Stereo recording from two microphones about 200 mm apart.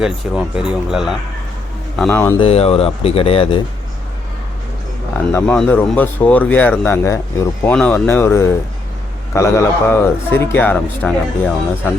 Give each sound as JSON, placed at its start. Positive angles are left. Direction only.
{"t": 0.0, "sound": "speech", "side_deg": -5}
{"t": 2.0, "sound": "speech", "side_deg": 10}
{"t": 2.4, "sound": "speech", "side_deg": 30}
{"t": 5.3, "sound": "speech", "side_deg": 10}